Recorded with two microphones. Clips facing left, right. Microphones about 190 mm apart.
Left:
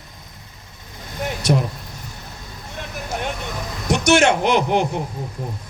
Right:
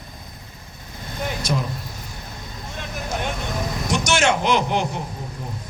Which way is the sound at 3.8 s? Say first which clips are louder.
Left 5 dB; 60° left (ahead or behind).